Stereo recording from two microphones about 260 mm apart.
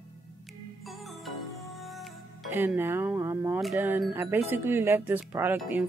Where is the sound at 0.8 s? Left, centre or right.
Centre.